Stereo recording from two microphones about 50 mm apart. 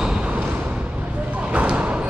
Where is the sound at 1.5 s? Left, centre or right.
Right.